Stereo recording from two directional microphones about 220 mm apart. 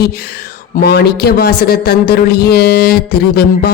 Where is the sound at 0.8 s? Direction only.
45° left (ahead or behind).